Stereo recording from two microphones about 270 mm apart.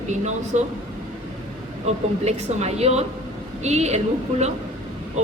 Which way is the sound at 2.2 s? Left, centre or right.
Right.